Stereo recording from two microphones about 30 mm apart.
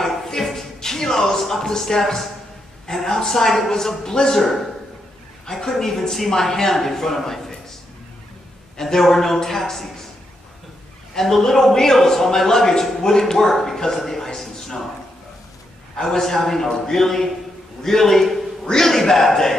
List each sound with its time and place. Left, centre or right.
0.4 s shuffle: centre
0.7 s a sound: centre
2.9 s a man's voice: centre
5.5 s a man's voice: centre
8.7 s a man's voice: centre
11.1 s a man's voice: centre
13.9 s a sound: centre
16.0 s a man's voice: centre